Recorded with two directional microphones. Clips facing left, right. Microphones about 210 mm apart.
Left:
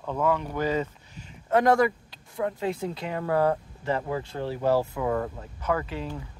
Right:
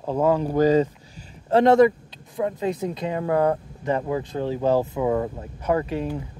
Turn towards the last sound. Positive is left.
turn(degrees=-25)  # may be behind; listen again after turning